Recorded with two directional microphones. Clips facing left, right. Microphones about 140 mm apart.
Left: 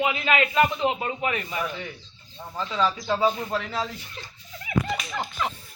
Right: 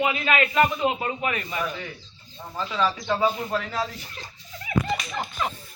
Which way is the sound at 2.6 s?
10° left (ahead or behind).